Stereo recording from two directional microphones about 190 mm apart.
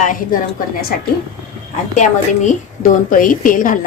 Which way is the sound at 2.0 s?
40° left (ahead or behind).